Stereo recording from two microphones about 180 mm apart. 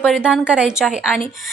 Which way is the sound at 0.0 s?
Centre (ahead or behind).